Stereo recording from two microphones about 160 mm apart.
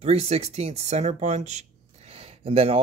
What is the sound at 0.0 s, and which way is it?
Speech, 40° right (ahead or behind).